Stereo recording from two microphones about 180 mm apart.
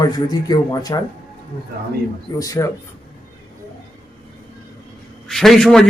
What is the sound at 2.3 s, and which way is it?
Speech, 20° left (ahead or behind).